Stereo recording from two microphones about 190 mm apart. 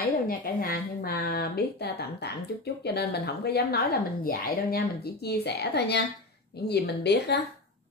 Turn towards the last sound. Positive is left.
turn(degrees=60)  # may be behind; listen again after turning